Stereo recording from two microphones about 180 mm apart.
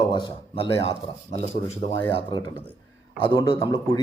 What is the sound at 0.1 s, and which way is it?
A man's voice, 25° left (ahead or behind).